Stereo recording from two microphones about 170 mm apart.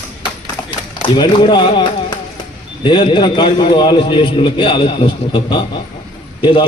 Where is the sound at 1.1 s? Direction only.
25° left (ahead or behind).